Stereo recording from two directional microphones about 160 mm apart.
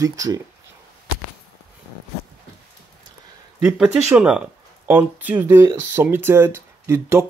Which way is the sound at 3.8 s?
5° right (ahead or behind).